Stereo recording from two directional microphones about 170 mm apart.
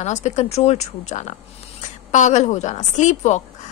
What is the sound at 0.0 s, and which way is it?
Speech, 45° left (ahead or behind).